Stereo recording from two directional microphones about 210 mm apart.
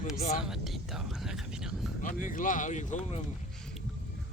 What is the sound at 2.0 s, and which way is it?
Speech, 40° left (ahead or behind).